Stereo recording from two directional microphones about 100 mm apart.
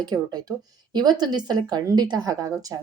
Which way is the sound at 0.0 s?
40° right (ahead or behind).